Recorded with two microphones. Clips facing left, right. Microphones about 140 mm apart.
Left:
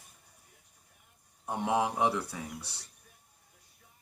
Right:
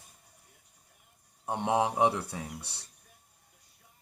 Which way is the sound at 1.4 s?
20° right (ahead or behind).